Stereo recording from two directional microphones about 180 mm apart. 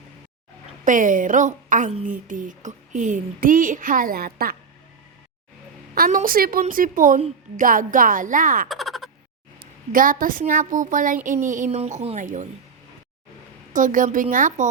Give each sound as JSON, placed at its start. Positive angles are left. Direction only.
{"t": 0.9, "sound": "speech", "side_deg": -45}
{"t": 5.9, "sound": "speech", "side_deg": -50}
{"t": 8.7, "sound": "a sound", "side_deg": 0}
{"t": 9.6, "sound": "speech", "side_deg": -50}
{"t": 13.7, "sound": "speech", "side_deg": -45}